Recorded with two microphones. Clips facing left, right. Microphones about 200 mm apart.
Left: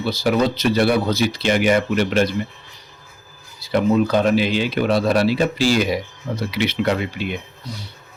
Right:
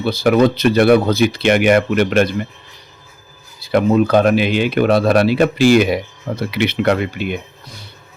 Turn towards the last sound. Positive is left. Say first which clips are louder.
# right 4 dB
turn(degrees=-50)  # may be behind; listen again after turning